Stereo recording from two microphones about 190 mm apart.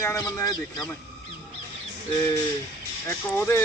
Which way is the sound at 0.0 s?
15° left (ahead or behind).